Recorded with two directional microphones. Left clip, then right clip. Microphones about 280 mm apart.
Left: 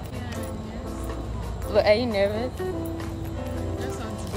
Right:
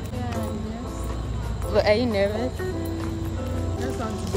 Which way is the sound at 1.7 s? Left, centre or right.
Centre.